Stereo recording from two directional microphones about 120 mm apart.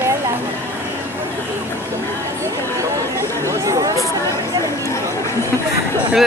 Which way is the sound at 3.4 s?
25° right (ahead or behind).